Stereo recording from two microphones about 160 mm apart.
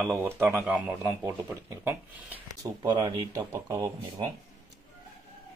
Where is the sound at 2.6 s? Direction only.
25° right (ahead or behind).